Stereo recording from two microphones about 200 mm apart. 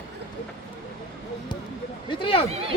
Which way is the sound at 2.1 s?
25° left (ahead or behind).